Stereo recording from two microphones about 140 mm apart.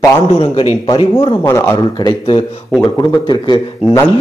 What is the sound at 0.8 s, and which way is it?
Speech, 35° left (ahead or behind).